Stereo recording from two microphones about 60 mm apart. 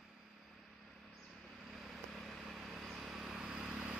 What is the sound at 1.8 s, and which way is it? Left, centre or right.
Vehicle, centre.